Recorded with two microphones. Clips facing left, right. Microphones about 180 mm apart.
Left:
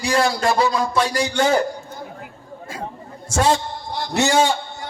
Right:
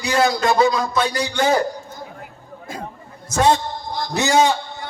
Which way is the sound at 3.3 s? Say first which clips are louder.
Right 2 dB; 30° left (ahead or behind).